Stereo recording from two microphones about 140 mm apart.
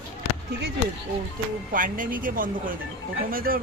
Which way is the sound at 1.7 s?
75° right (ahead or behind).